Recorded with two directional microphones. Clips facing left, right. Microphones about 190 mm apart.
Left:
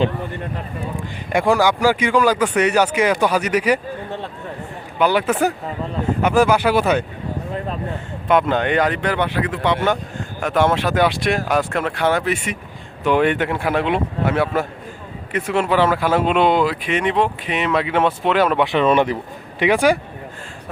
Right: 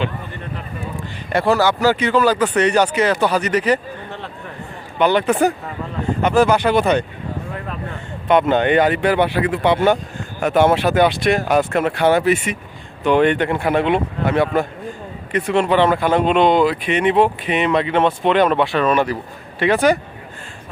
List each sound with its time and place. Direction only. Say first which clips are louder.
1.3 s speech: even; 15° left (ahead or behind)
4.9 s speech: right 2 dB; 5° left (ahead or behind)
8.3 s speech: right 3 dB; centre (ahead or behind)
18.6 s speech: left 1 dB; 20° left (ahead or behind)